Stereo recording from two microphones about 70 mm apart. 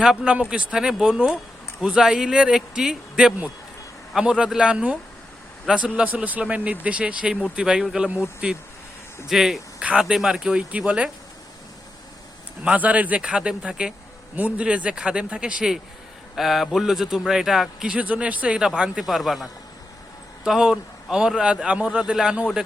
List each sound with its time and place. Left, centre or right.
0.0 s a man's voice: centre
9.3 s a man's voice: centre
12.6 s a man's voice: right